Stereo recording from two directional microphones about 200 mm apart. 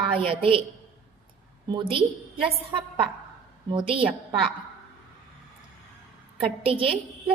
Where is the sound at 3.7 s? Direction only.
25° right (ahead or behind).